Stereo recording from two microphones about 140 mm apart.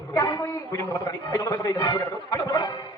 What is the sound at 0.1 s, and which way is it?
A man's voice, 30° left (ahead or behind).